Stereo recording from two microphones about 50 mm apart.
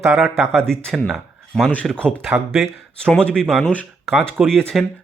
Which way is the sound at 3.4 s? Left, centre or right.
Centre.